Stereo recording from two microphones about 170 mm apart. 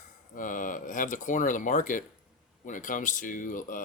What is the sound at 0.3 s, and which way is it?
Speech, 50° left (ahead or behind).